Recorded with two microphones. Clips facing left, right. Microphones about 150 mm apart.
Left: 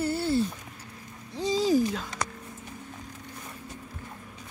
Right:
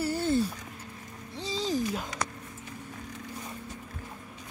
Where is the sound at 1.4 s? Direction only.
10° left (ahead or behind).